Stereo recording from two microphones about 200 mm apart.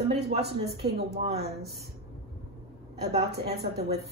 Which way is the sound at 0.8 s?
30° right (ahead or behind).